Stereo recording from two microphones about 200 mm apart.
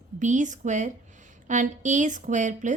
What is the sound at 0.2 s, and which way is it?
A woman's voice, 40° right (ahead or behind).